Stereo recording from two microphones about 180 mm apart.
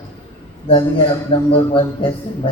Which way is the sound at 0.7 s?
30° left (ahead or behind).